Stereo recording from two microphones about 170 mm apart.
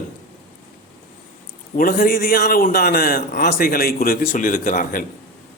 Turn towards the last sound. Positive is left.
turn(degrees=55)  # may be behind; listen again after turning